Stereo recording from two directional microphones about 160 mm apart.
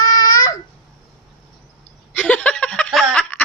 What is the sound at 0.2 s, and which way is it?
Babbling, 25° left (ahead or behind).